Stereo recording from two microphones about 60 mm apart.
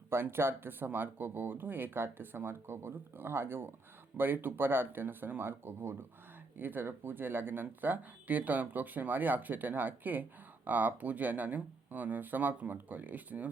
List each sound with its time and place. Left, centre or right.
0.1 s speech: right